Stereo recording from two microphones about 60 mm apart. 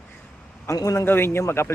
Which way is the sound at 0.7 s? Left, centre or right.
Left.